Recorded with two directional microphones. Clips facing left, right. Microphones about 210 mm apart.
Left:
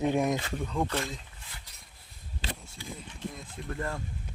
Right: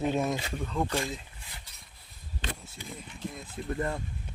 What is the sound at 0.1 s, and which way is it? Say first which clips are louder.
Speech: left 2 dB; 15° left (ahead or behind).